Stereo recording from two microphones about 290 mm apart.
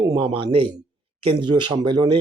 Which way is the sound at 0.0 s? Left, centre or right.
Centre.